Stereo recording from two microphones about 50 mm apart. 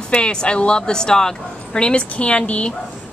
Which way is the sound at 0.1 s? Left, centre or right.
Centre.